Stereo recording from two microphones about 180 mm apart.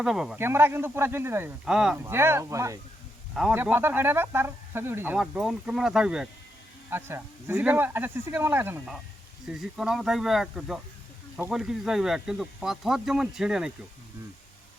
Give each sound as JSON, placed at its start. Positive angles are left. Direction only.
{"t": 0.0, "sound": "speech", "side_deg": 0}
{"t": 2.0, "sound": "speech", "side_deg": -15}